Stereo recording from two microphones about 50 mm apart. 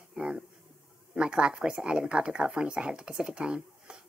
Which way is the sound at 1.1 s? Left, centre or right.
Centre.